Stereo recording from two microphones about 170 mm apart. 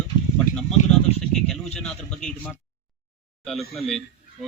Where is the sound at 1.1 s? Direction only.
5° left (ahead or behind).